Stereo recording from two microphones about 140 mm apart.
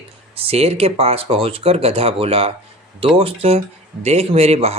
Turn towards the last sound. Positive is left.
turn(degrees=-50)  # may be behind; listen again after turning